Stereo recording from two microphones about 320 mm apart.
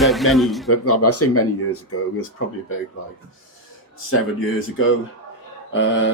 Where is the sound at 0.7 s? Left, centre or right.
Left.